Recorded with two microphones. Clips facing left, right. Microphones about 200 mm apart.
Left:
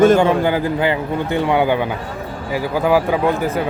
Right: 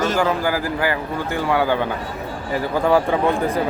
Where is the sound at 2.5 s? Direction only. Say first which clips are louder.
Left 1 dB; 5° left (ahead or behind).